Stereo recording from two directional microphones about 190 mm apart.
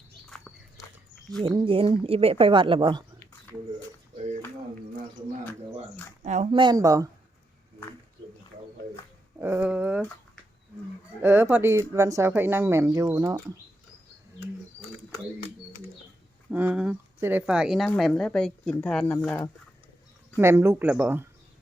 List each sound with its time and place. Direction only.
0.3 s walk: 5° left (ahead or behind)
1.4 s speech: 25° right (ahead or behind)
6.2 s speech: 40° right (ahead or behind)
6.5 s speech: 25° right (ahead or behind)
9.4 s speech: 10° right (ahead or behind)
11.2 s speech: 10° right (ahead or behind)
16.5 s speech: 5° right (ahead or behind); by 19.5 s 10° left (ahead or behind)
20.3 s speech: 10° right (ahead or behind)